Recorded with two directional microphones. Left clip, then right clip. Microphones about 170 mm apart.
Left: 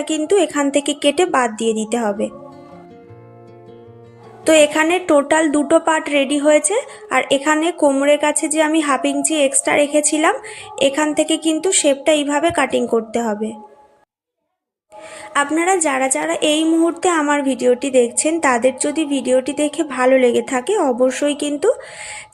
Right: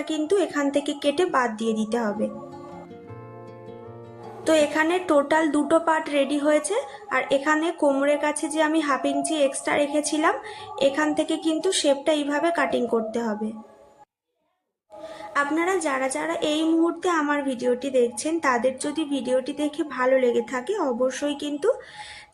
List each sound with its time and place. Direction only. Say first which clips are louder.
0.0 s a woman's voice: left 7 dB; 25° left (ahead or behind)
4.4 s a woman's voice: left 8 dB; 25° left (ahead or behind)
15.3 s a woman's voice: left 7 dB; 30° left (ahead or behind)